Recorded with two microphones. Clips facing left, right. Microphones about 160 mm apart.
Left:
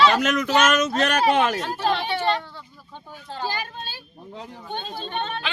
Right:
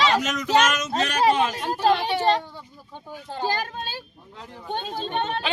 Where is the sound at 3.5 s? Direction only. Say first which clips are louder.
Right 4 dB; 40° right (ahead or behind).